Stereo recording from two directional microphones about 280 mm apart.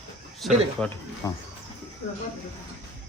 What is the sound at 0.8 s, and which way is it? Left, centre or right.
Speech, centre.